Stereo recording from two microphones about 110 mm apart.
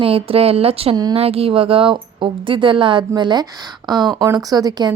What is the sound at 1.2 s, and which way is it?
A woman's voice, 65° right (ahead or behind).